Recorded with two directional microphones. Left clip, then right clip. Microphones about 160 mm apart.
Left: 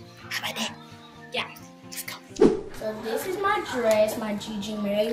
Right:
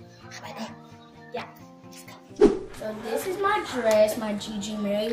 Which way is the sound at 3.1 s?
Centre (ahead or behind).